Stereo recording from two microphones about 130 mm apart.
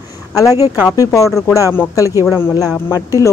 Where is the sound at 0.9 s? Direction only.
25° left (ahead or behind).